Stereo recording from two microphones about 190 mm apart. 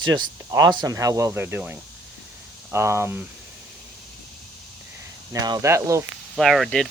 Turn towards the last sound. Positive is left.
turn(degrees=0)  # may be behind; listen again after turning